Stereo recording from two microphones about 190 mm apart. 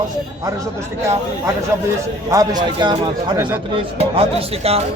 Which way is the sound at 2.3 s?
20° right (ahead or behind).